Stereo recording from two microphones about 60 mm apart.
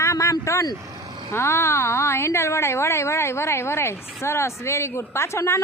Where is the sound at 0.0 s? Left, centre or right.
Left.